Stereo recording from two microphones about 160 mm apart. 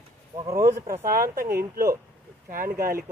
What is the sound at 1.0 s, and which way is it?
Speech, 65° right (ahead or behind).